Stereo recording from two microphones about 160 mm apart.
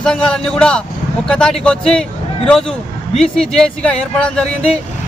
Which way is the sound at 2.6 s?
35° left (ahead or behind).